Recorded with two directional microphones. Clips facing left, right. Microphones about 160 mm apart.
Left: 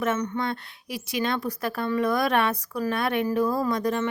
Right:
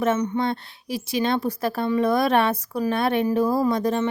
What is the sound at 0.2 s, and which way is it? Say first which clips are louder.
Speech: right 4 dB; 15° right (ahead or behind).